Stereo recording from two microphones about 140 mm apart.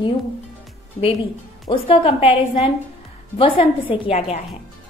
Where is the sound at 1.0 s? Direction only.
45° left (ahead or behind).